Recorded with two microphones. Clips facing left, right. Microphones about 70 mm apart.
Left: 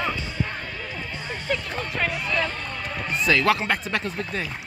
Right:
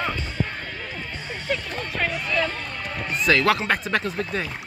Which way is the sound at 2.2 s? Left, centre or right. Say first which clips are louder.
Right 1 dB; centre.